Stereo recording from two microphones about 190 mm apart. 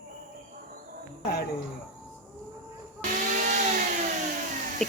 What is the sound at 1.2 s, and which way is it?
Speech, 60° left (ahead or behind).